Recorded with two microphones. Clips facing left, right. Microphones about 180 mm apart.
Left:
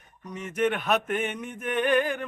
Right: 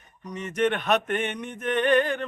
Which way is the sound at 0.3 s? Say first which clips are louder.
Right 1 dB; 5° left (ahead or behind).